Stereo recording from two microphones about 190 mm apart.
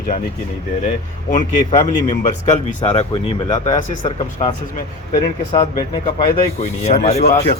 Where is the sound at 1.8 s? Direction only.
35° left (ahead or behind).